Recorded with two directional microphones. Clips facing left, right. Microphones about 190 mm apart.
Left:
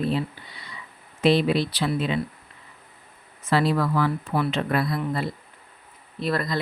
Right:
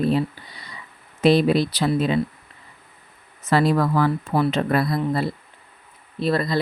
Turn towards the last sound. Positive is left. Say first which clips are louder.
# right 4 dB
turn(degrees=-30)  # may be behind; listen again after turning